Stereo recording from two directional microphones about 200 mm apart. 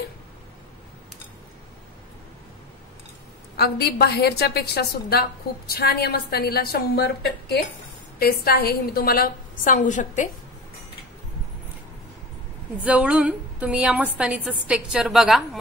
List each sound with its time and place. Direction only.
3.5 s a woman's voice: 55° left (ahead or behind)
8.2 s a woman's voice: 50° left (ahead or behind)
12.8 s a woman's voice: 5° right (ahead or behind)